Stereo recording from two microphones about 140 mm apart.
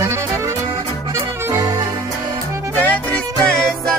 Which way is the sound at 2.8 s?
10° left (ahead or behind).